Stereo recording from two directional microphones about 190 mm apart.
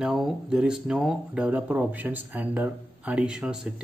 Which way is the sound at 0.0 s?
Centre (ahead or behind).